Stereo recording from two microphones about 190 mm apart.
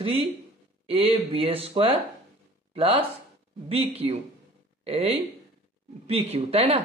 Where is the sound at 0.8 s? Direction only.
30° right (ahead or behind).